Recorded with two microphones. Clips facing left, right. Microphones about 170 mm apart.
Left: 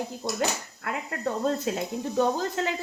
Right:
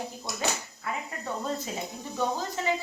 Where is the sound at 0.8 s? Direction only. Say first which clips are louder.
Left 3 dB; 75° left (ahead or behind).